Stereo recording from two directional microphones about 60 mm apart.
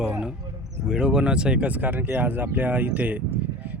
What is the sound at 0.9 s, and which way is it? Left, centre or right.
Speech, centre.